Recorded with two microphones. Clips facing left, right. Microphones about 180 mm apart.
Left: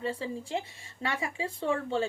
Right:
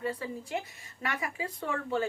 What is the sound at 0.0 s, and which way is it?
Speech, 25° left (ahead or behind).